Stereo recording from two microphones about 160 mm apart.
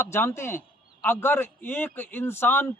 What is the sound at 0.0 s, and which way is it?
Speech, 15° left (ahead or behind).